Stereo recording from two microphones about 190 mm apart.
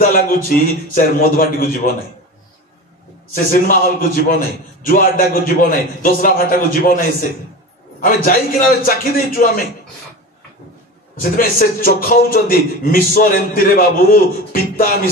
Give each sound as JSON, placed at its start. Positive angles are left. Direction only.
{"t": 0.1, "sound": "a man's voice", "side_deg": 50}
{"t": 3.3, "sound": "a man's voice", "side_deg": 50}
{"t": 11.1, "sound": "a man's voice", "side_deg": 50}